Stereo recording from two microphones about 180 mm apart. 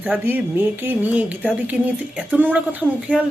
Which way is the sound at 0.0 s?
10° right (ahead or behind).